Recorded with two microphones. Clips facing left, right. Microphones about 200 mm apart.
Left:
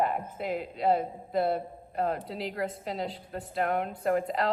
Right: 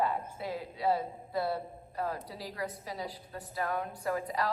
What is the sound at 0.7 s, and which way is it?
A man's voice, 50° left (ahead or behind).